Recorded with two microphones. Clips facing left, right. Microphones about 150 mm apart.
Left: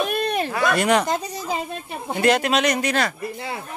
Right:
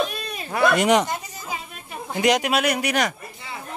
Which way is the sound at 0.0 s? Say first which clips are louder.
Left 5 dB; 60° left (ahead or behind).